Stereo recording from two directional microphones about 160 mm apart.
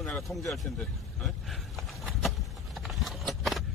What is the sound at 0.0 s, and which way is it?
Speech, 5° left (ahead or behind).